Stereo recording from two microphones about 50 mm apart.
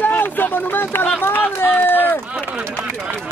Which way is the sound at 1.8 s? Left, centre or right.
Left.